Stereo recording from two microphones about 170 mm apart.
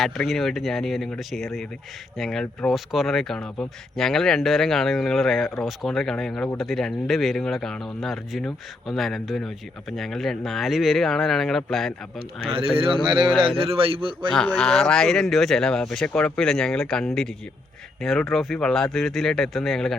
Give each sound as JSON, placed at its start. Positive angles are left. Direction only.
{"t": 0.0, "sound": "speech", "side_deg": 0}
{"t": 12.7, "sound": "a man's voice", "side_deg": -30}
{"t": 14.3, "sound": "speech", "side_deg": 5}